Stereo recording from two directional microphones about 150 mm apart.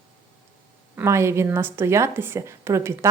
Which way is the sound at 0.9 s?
20° right (ahead or behind).